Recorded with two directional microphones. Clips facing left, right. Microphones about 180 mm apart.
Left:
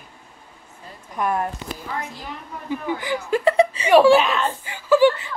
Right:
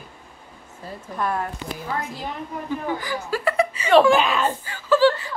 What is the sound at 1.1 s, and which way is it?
Speech, 15° left (ahead or behind).